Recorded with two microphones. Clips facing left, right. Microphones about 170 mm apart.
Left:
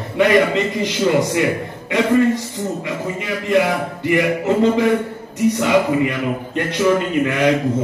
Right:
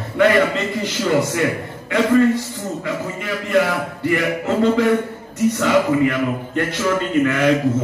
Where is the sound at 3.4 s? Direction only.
20° left (ahead or behind).